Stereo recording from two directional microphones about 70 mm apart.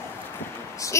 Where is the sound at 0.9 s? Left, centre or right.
Left.